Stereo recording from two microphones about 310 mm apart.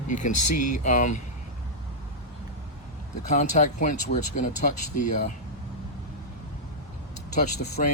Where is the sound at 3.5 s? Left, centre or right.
Left.